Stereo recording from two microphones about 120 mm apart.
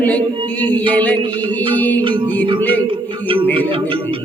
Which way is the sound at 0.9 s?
10° left (ahead or behind).